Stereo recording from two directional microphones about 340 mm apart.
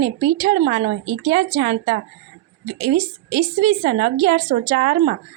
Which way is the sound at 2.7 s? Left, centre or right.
Right.